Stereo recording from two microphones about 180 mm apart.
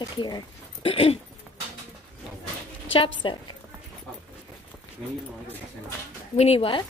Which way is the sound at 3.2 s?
25° left (ahead or behind).